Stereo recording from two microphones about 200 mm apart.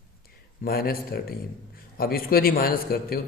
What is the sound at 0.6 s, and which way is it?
Speech, 50° left (ahead or behind).